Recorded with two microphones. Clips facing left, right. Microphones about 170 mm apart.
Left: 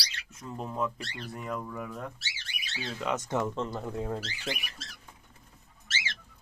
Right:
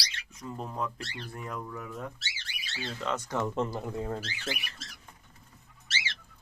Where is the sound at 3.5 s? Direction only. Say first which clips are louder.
Right 2 dB; 10° right (ahead or behind).